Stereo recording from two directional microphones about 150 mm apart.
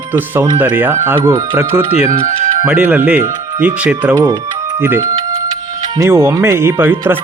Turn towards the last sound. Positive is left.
turn(degrees=-15)  # may be behind; listen again after turning